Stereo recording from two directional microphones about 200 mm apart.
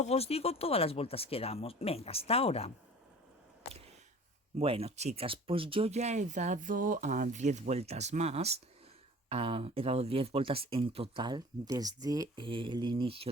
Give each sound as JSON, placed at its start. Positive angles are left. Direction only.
{"t": 0.0, "sound": "speech", "side_deg": 30}
{"t": 4.5, "sound": "speech", "side_deg": -30}